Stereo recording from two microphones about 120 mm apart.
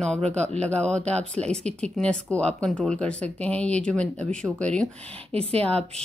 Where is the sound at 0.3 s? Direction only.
10° left (ahead or behind).